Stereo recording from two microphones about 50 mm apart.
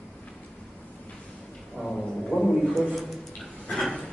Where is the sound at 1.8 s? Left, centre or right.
Centre.